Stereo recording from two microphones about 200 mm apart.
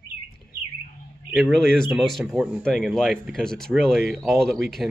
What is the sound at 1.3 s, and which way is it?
Speech, centre (ahead or behind).